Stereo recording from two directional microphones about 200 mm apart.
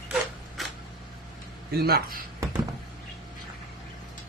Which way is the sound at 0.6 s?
Centre (ahead or behind).